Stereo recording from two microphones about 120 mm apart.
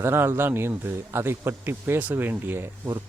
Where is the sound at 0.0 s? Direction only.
20° right (ahead or behind).